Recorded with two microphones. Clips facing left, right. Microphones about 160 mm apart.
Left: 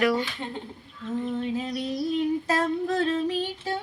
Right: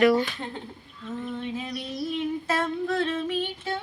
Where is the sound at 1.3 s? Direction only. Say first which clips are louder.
Left 4 dB; 40° left (ahead or behind).